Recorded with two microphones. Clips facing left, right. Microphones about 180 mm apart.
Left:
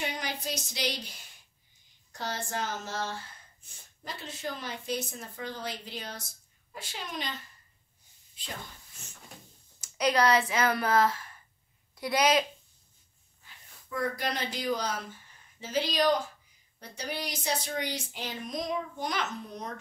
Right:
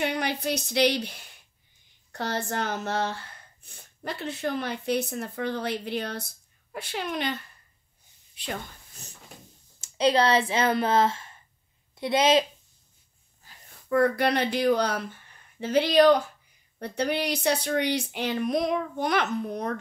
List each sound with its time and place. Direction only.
0.0 s speech: 65° right (ahead or behind)
8.4 s speech: 70° right (ahead or behind)
9.0 s cupboard open or close: 35° right (ahead or behind)
9.8 s a woman's voice: 25° right (ahead or behind)
13.4 s a sound: 40° right (ahead or behind)
13.8 s speech: 65° right (ahead or behind)